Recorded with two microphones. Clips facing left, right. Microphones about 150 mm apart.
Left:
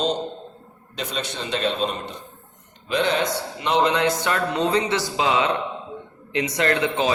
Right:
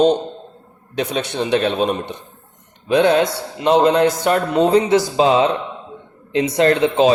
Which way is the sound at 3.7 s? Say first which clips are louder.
Right 7 dB; 45° right (ahead or behind).